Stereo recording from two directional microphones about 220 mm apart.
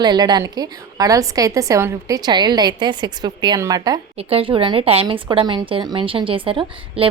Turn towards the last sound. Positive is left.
turn(degrees=-25)  # may be behind; listen again after turning